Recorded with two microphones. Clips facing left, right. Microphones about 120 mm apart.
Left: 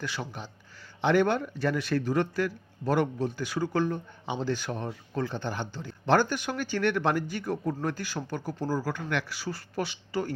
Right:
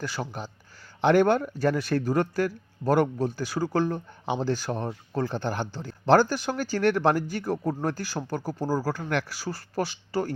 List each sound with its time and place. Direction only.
0.0 s speech: 40° right (ahead or behind)